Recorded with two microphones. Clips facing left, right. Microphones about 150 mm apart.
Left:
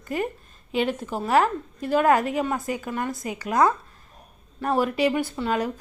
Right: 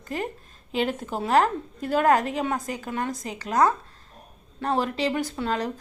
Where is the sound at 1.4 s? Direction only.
40° right (ahead or behind).